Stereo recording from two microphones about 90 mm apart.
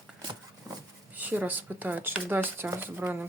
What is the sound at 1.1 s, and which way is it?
Speech, 20° right (ahead or behind).